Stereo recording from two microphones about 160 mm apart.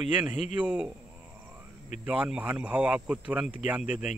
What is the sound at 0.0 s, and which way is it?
Speech, 5° right (ahead or behind).